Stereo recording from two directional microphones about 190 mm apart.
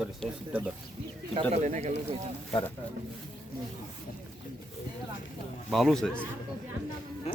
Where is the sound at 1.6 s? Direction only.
40° right (ahead or behind).